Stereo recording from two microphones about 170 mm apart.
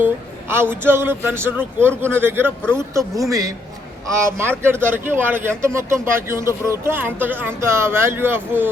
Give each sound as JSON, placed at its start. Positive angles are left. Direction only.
{"t": 0.0, "sound": "speech", "side_deg": -15}